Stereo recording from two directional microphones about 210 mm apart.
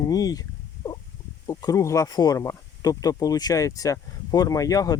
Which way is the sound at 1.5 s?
15° left (ahead or behind).